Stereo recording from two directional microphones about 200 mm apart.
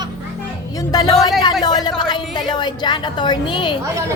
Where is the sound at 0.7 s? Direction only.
20° left (ahead or behind).